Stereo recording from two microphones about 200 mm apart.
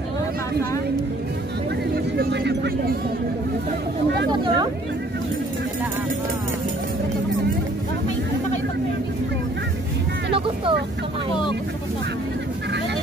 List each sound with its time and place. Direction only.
2.1 s speech: 60° right (ahead or behind)
4.3 s speech: 20° right (ahead or behind)
10.3 s vehicle: 25° right (ahead or behind)